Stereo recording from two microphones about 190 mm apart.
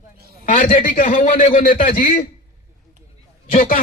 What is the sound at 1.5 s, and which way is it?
Speech, 50° left (ahead or behind).